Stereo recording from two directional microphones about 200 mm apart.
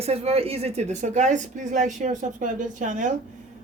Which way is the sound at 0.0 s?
30° right (ahead or behind).